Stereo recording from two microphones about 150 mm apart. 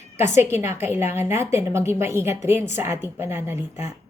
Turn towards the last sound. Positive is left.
turn(degrees=-15)  # may be behind; listen again after turning